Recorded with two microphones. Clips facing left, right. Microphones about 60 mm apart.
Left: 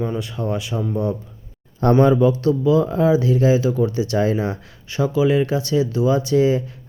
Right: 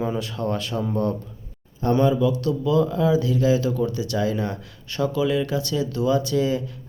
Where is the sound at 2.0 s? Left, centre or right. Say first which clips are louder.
Left 5 dB; left.